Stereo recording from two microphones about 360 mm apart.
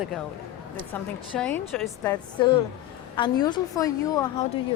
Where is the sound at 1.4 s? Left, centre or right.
Centre.